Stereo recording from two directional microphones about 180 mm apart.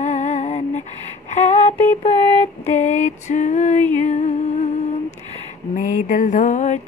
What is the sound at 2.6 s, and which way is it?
Female singing, 40° left (ahead or behind).